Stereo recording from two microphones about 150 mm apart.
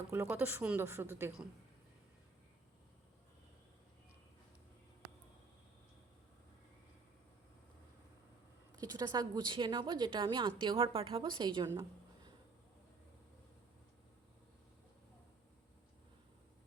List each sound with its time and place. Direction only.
0.1 s a woman's voice: 15° right (ahead or behind)
8.8 s a woman's voice: 25° right (ahead or behind)
11.6 s a woman's voice: 15° right (ahead or behind)